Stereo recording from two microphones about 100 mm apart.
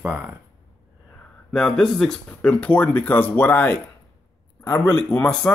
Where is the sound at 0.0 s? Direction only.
15° right (ahead or behind).